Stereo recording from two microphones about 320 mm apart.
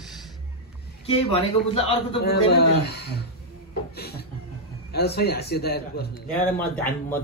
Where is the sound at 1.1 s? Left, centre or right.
Centre.